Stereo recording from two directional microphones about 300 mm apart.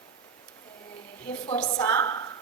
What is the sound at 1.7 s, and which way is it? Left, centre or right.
Speech, centre.